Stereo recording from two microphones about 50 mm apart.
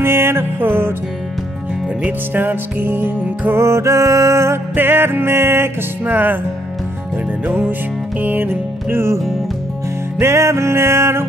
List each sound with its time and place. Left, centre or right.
0.0 s music: right
2.0 s music: right
3.5 s music: right
4.7 s music: right
6.0 s music: right
8.2 s music: right
10.1 s music: right